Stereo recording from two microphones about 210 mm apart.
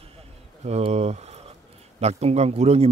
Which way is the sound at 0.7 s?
30° right (ahead or behind).